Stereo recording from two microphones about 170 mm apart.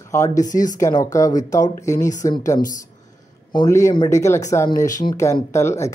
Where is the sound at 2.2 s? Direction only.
20° left (ahead or behind).